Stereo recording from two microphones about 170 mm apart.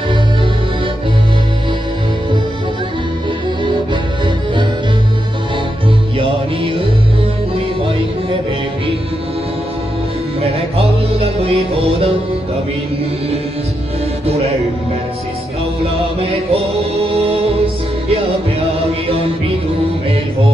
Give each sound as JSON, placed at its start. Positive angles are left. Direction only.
{"t": 10.4, "sound": "music", "side_deg": -35}
{"t": 14.2, "sound": "music", "side_deg": -35}
{"t": 15.8, "sound": "music", "side_deg": -35}